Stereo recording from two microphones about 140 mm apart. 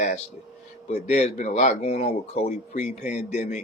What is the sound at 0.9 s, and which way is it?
Speech, 50° left (ahead or behind).